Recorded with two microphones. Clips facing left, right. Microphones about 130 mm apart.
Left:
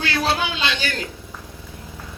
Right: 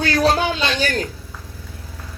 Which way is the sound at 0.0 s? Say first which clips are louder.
Right 5 dB; 40° right (ahead or behind).